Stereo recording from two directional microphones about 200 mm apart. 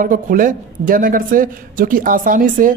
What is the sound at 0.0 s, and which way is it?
Speech, 40° right (ahead or behind).